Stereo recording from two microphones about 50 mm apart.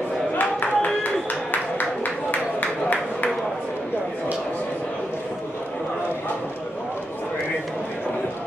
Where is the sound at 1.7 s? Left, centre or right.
Left.